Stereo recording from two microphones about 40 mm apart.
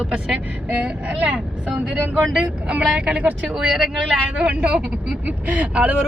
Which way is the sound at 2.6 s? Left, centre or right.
Right.